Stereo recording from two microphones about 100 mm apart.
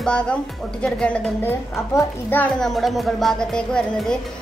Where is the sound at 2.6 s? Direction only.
Centre (ahead or behind).